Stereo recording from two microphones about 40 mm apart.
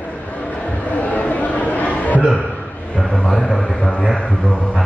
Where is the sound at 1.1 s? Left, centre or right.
Left.